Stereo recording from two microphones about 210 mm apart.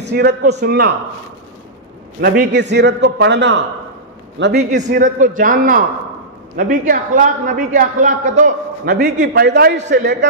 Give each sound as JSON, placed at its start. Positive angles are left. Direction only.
{"t": 0.0, "sound": "a man's voice", "side_deg": -50}
{"t": 2.2, "sound": "a man's voice", "side_deg": -50}
{"t": 4.6, "sound": "a man's voice", "side_deg": -35}